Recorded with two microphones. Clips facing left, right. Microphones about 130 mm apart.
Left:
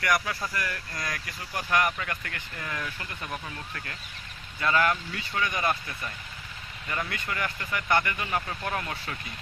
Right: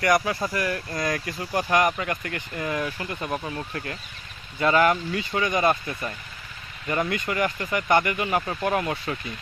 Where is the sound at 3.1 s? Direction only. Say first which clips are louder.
Right 8 dB; 35° right (ahead or behind); by 9.1 s 20° right (ahead or behind).